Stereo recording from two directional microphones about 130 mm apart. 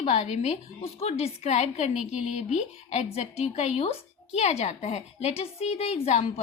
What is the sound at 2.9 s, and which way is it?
A woman's voice, 55° left (ahead or behind).